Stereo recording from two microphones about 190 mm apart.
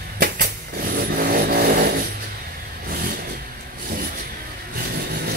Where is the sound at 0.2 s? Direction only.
50° right (ahead or behind).